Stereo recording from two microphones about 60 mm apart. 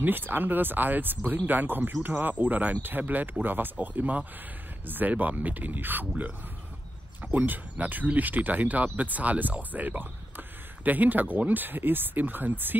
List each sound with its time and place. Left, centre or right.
0.0 s speech: right
7.3 s speech: right